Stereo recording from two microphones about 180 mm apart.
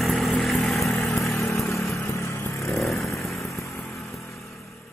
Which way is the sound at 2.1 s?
15° left (ahead or behind).